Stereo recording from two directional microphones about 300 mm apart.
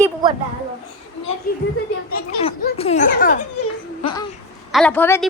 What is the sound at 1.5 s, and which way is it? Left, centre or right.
Speech, left.